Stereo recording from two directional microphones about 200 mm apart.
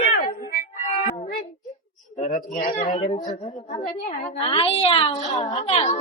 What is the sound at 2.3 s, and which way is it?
A man's voice, 40° left (ahead or behind).